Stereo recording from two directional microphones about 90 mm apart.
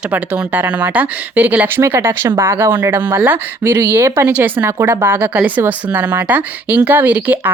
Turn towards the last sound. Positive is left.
turn(degrees=-20)  # may be behind; listen again after turning